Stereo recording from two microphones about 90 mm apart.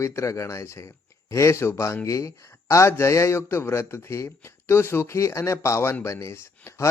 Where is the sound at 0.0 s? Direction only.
35° left (ahead or behind).